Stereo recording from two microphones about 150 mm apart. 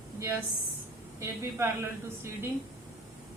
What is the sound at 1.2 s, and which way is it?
A woman's voice, 15° right (ahead or behind).